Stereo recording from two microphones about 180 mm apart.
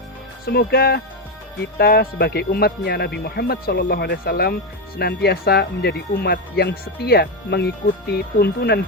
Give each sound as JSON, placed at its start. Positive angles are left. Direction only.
{"t": 0.4, "sound": "speech", "side_deg": 60}